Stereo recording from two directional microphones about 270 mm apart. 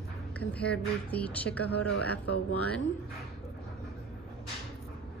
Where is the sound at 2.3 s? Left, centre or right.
Left.